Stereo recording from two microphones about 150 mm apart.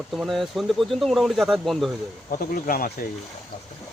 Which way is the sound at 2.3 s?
65° left (ahead or behind).